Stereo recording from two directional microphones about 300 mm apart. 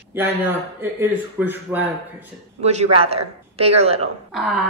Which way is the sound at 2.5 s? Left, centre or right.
Right.